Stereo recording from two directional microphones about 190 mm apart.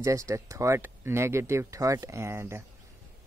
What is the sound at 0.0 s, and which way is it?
Speech, 15° right (ahead or behind).